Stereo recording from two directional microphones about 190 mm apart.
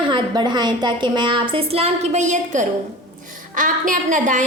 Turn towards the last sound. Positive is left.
turn(degrees=-40)  # may be behind; listen again after turning